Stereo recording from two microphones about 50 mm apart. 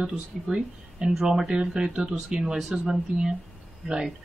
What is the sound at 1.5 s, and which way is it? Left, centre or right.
A woman's voice, centre.